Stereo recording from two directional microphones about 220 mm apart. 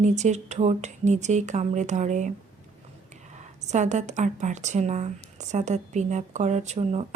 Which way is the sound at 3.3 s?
30° right (ahead or behind).